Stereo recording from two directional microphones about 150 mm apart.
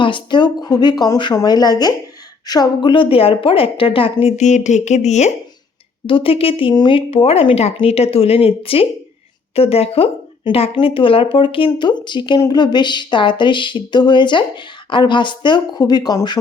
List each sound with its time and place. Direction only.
0.0 s speech: 30° left (ahead or behind); by 5.3 s 50° left (ahead or behind)
6.1 s speech: 35° left (ahead or behind)